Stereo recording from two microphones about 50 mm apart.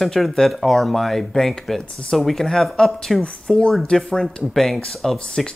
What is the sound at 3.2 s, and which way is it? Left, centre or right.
Speech, centre.